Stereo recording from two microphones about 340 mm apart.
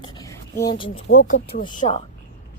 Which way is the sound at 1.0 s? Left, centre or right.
Left.